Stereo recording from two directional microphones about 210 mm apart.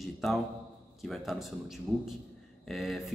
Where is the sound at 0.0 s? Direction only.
Centre (ahead or behind).